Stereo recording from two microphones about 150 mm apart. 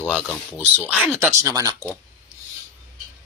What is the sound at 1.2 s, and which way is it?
Speech, 20° right (ahead or behind).